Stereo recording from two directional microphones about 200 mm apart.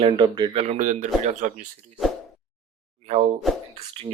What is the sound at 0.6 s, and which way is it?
Speech, 35° right (ahead or behind).